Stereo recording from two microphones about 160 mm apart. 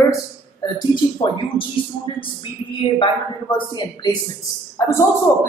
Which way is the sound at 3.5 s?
25° left (ahead or behind).